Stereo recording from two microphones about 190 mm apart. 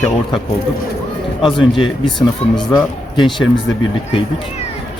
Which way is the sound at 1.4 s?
25° left (ahead or behind).